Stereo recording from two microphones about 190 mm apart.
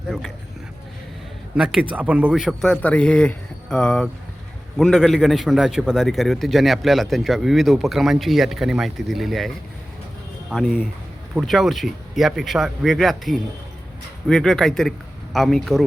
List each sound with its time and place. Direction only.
1.5 s a man's voice: 5° right (ahead or behind)
10.5 s a man's voice: centre (ahead or behind)